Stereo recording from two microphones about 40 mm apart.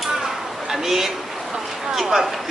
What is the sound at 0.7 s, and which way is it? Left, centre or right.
A man's voice, centre.